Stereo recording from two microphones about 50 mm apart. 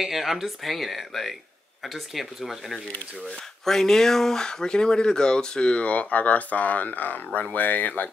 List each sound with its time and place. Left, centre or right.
0.0 s speech: centre
3.6 s speech: centre; by 8.1 s left